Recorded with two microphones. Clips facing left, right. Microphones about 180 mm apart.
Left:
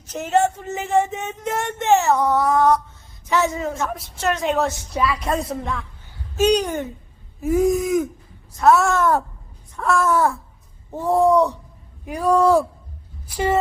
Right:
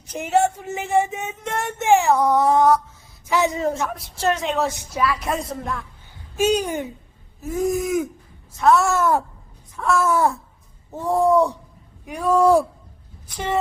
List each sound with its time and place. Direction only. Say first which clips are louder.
0.1 s speech: even; 10° right (ahead or behind)
2.4 s a sound: right 1 dB; 25° right (ahead or behind)
3.2 s speech: right 1 dB; 15° right (ahead or behind)
7.4 s gasp: left 5 dB; 10° left (ahead or behind)
7.7 s speech: left 2 dB; centre (ahead or behind)
10.1 s speech: left 1 dB; 15° right (ahead or behind)
10.9 s speech: left 1 dB; centre (ahead or behind)
12.4 s speech: right 1 dB; 15° right (ahead or behind)
13.3 s speech: left 4 dB; 5° left (ahead or behind)